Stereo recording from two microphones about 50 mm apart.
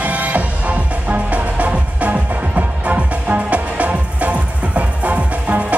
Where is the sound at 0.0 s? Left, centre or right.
Right.